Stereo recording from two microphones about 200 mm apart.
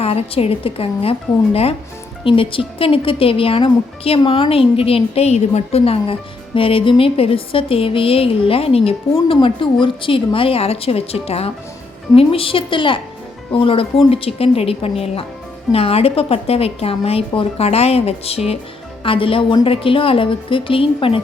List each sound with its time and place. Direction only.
0.0 s speech: 30° left (ahead or behind)
2.2 s speech: 25° left (ahead or behind)